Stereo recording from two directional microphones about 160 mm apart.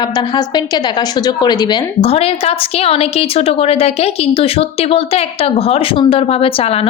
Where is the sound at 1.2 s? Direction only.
25° left (ahead or behind).